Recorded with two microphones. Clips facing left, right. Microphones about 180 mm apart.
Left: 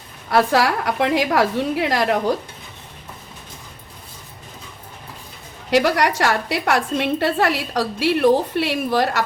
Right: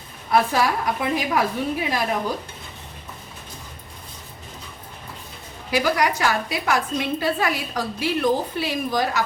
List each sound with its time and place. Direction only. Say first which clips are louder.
0.3 s a woman's voice: left 3 dB; 75° left (ahead or behind)
5.7 s a woman's voice: left 4 dB; 70° left (ahead or behind)